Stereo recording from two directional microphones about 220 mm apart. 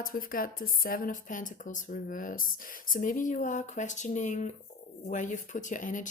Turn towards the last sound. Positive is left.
turn(degrees=35)  # may be behind; listen again after turning